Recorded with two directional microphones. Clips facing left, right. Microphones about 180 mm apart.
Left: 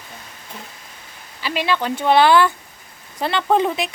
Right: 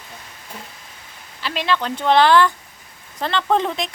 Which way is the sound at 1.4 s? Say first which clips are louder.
Left 1 dB; 5° left (ahead or behind).